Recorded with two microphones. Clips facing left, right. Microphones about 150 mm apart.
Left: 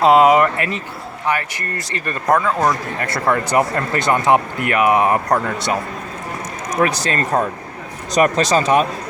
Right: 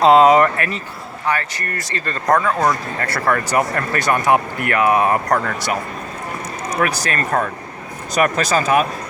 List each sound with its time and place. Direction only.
0.0 s speech: 10° left (ahead or behind)
0.5 s speech: 20° left (ahead or behind)
2.2 s speech: 5° left (ahead or behind)
3.0 s speech: 20° left (ahead or behind)
6.7 s speech: 20° left (ahead or behind)